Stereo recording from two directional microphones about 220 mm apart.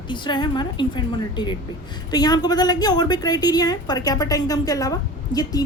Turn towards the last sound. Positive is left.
turn(degrees=15)  # may be behind; listen again after turning